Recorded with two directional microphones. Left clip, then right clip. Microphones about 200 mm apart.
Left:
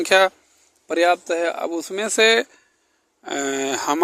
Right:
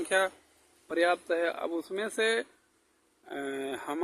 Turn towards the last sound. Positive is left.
turn(degrees=50)  # may be behind; listen again after turning